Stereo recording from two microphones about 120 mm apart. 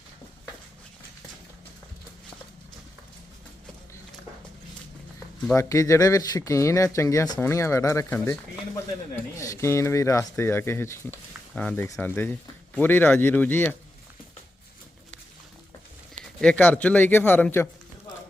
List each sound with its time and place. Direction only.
5.5 s speech: 25° left (ahead or behind)
16.4 s speech: 10° left (ahead or behind)